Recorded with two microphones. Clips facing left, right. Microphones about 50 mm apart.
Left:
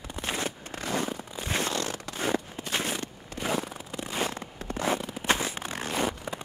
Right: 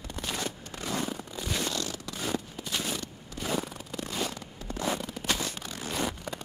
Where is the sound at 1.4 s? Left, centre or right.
Left.